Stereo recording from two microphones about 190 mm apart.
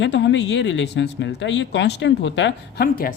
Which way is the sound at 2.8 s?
50° left (ahead or behind).